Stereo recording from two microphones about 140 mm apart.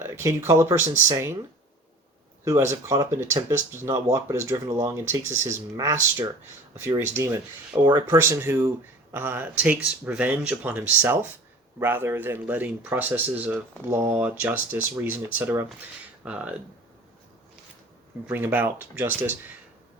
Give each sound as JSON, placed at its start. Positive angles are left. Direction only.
{"t": 0.0, "sound": "speech", "side_deg": -20}
{"t": 2.4, "sound": "speech", "side_deg": -20}
{"t": 18.3, "sound": "speech", "side_deg": -15}